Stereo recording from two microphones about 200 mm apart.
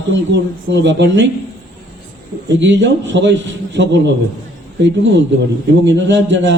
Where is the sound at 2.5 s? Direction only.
65° right (ahead or behind).